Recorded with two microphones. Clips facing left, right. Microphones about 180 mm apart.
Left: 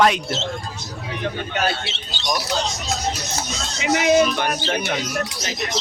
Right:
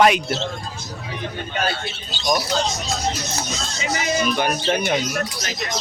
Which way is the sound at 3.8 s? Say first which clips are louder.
Left 7 dB; 65° left (ahead or behind).